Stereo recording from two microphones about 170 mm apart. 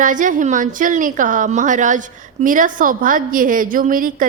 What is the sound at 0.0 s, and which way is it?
A woman's voice, 50° right (ahead or behind).